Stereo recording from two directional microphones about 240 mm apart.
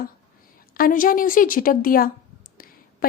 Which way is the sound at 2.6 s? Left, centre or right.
Left.